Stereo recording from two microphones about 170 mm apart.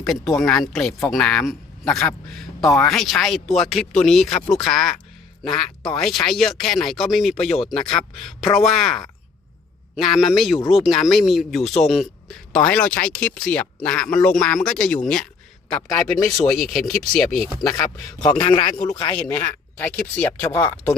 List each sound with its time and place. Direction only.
0.0 s speech: centre (ahead or behind)
18.2 s a man's voice: 30° left (ahead or behind)
19.1 s speech: 10° left (ahead or behind)